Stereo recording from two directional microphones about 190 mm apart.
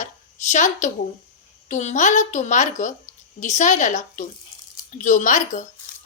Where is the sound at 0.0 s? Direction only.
40° left (ahead or behind).